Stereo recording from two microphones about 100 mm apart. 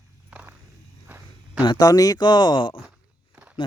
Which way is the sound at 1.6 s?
40° left (ahead or behind).